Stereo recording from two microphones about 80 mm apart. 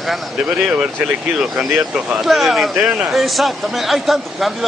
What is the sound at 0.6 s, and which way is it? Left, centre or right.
Speech, centre.